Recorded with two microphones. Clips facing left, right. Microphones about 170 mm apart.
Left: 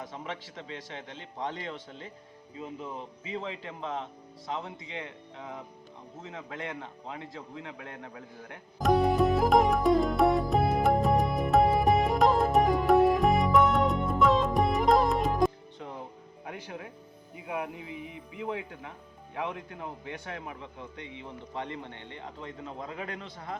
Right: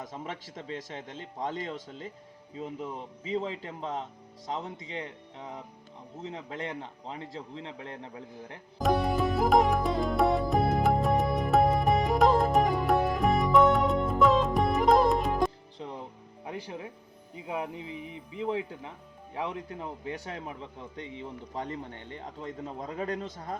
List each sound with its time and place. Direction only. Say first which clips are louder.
0.1 s a man's voice: even; 45° right (ahead or behind)
3.2 s speech: right 5 dB; 35° right (ahead or behind)
6.2 s a man's voice: right 2 dB; 30° right (ahead or behind)
8.8 s music: left 3 dB; centre (ahead or behind)
15.8 s music: right 2 dB; 25° right (ahead or behind)
16.5 s a man's voice: right 2 dB; 25° right (ahead or behind); by 23.6 s 40° right (ahead or behind)